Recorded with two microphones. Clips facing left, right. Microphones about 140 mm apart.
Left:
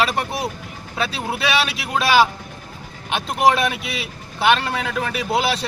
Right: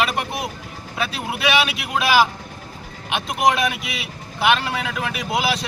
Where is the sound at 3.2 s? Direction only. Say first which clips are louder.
Left 2 dB; 35° left (ahead or behind).